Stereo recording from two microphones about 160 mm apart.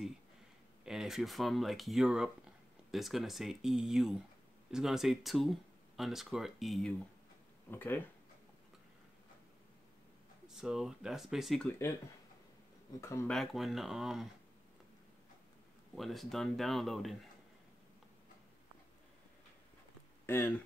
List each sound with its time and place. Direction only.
0.8 s speech: 5° right (ahead or behind)
7.7 s speech: 10° left (ahead or behind)
10.4 s speech: 5° right (ahead or behind)
13.0 s speech: 20° left (ahead or behind)
13.3 s speech: centre (ahead or behind)
15.9 s speech: centre (ahead or behind)
20.2 s speech: 15° left (ahead or behind)